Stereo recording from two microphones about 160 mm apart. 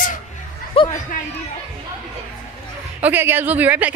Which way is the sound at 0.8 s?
35° left (ahead or behind).